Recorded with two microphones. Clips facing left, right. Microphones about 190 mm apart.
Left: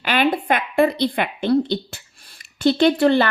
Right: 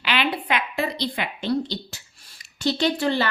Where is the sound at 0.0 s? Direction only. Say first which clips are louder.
Left 6 dB; 45° left (ahead or behind).